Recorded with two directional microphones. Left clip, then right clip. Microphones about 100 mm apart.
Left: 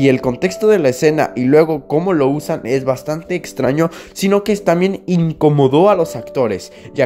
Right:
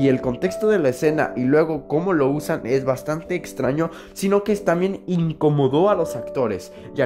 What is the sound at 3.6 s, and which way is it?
Speech, 25° left (ahead or behind).